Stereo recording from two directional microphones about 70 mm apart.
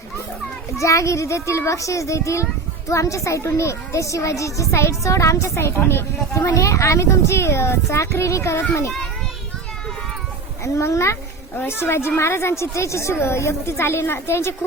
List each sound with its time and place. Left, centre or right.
0.8 s a woman's voice: left
10.6 s a woman's voice: left